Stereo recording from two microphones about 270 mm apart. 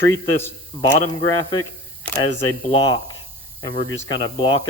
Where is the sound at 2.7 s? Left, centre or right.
Centre.